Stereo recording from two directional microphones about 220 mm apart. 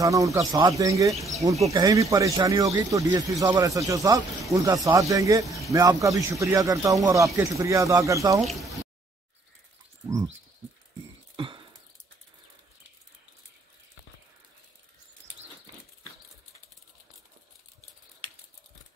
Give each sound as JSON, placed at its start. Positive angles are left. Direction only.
{"t": 0.0, "sound": "speech", "side_deg": -15}
{"t": 8.4, "sound": "speech", "side_deg": 0}
{"t": 11.3, "sound": "a sound", "side_deg": -20}